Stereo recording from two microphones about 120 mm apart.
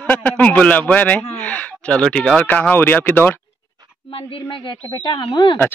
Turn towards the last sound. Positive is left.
turn(degrees=45)  # may be behind; listen again after turning